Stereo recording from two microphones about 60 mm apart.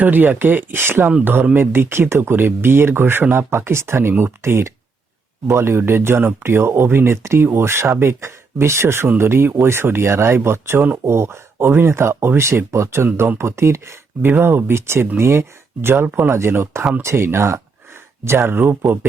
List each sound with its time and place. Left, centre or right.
0.0 s speech: right
11.0 s speech: right